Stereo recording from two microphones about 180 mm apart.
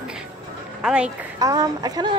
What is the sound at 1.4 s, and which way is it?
Speech, 20° right (ahead or behind).